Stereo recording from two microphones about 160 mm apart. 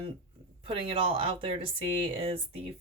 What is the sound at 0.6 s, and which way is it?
Speech, 35° right (ahead or behind).